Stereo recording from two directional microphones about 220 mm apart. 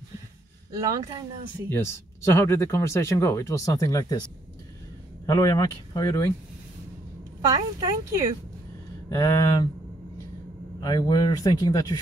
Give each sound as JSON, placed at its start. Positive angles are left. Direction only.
{"t": 0.7, "sound": "a woman's voice", "side_deg": -15}
{"t": 1.7, "sound": "speech", "side_deg": 10}
{"t": 5.2, "sound": "speech", "side_deg": 15}
{"t": 7.4, "sound": "a woman's voice", "side_deg": -15}
{"t": 9.1, "sound": "speech", "side_deg": 15}
{"t": 10.8, "sound": "speech", "side_deg": 20}